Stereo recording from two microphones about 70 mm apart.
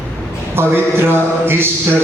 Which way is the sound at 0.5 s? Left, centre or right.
Right.